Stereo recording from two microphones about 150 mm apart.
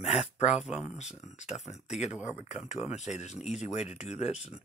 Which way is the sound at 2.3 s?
50° left (ahead or behind).